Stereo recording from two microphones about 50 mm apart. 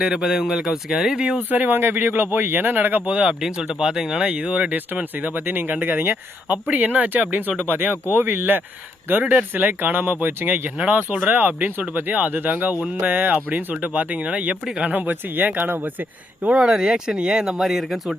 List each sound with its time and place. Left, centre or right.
0.0 s speech: centre
1.4 s speech: right
3.4 s speech: centre
4.3 s speech: right
4.9 s speech: right
10.8 s speech: right
16.6 s speech: centre